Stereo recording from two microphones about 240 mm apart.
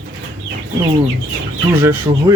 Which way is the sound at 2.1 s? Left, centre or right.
Right.